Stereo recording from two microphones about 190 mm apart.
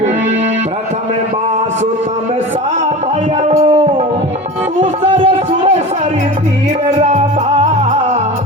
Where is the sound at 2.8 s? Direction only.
35° right (ahead or behind).